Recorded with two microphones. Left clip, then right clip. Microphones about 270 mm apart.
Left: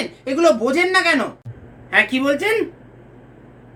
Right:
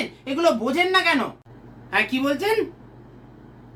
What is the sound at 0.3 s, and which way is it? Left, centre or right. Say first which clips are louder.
A man's voice: left 5 dB; centre.